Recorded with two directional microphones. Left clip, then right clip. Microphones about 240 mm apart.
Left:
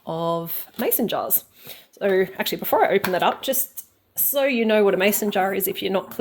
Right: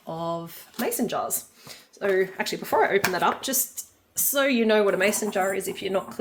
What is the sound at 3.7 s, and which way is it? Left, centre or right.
Speech, centre.